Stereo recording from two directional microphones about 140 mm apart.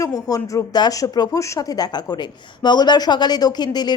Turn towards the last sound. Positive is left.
turn(degrees=30)  # may be behind; listen again after turning